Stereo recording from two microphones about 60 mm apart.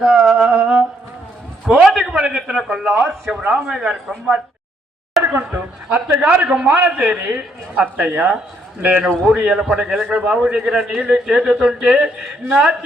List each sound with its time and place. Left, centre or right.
0.0 s a sound: centre
1.8 s a sound: centre
3.3 s speech: centre
5.2 s a sound: right
5.5 s a woman's voice: right
6.2 s speech: centre
6.7 s a woman's voice: right
7.1 s a woman's voice: centre
9.3 s speech: centre